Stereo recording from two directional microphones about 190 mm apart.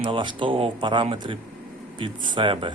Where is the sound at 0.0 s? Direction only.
25° right (ahead or behind).